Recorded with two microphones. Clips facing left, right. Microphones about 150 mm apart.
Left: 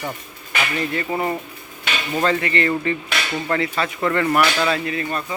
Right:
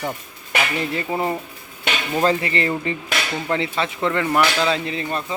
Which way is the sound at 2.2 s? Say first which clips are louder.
Even; 30° right (ahead or behind).